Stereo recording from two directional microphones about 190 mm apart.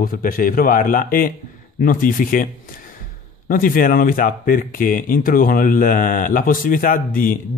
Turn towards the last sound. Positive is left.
turn(degrees=45)  # may be behind; listen again after turning